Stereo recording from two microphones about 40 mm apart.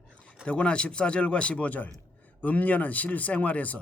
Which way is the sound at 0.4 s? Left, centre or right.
Left.